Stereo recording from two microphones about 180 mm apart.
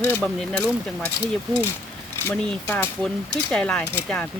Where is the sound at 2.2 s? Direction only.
10° left (ahead or behind).